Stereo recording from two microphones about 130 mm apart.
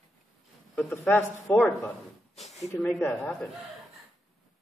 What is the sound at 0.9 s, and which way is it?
A man's voice, 20° left (ahead or behind).